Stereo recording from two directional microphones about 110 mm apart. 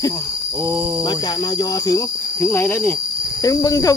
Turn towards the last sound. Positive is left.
turn(degrees=30)  # may be behind; listen again after turning